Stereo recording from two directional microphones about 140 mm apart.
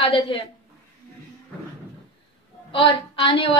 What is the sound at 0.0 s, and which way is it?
Speech, 40° left (ahead or behind).